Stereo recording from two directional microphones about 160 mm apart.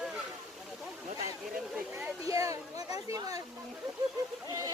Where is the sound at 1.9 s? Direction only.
20° right (ahead or behind).